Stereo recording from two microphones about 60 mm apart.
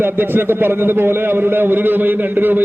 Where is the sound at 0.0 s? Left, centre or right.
Right.